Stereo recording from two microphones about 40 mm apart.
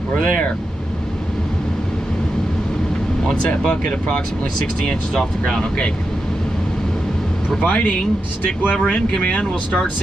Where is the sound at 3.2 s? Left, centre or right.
Left.